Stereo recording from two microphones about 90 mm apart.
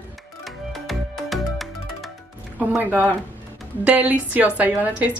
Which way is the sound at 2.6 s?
20° right (ahead or behind).